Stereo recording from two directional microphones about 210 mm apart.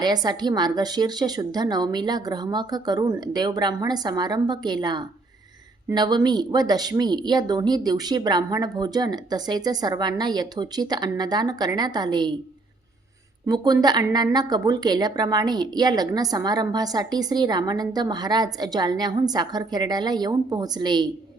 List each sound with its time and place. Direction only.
0.0 s a woman's voice: 20° right (ahead or behind)
13.5 s a woman's voice: 20° right (ahead or behind)